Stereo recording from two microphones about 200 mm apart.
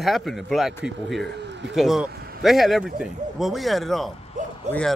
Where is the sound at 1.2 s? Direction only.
60° right (ahead or behind).